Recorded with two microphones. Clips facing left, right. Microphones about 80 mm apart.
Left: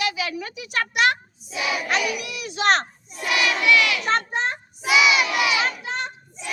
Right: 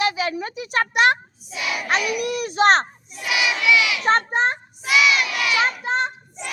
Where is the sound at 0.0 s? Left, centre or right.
Right.